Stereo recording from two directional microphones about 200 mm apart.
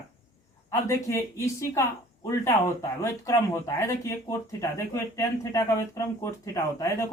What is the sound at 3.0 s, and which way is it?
Speech, 15° left (ahead or behind).